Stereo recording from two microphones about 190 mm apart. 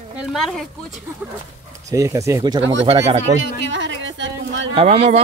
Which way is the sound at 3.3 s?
75° right (ahead or behind).